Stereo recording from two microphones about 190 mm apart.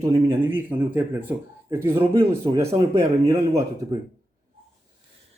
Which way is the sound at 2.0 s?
30° right (ahead or behind).